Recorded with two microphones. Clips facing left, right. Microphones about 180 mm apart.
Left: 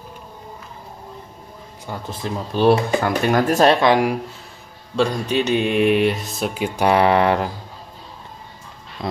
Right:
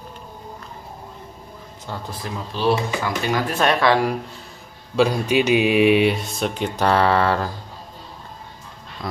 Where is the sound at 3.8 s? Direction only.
15° left (ahead or behind).